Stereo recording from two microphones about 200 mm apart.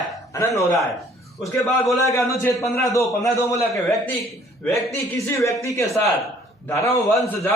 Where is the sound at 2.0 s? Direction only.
15° left (ahead or behind).